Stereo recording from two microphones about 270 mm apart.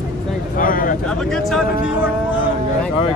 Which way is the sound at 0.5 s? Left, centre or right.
Left.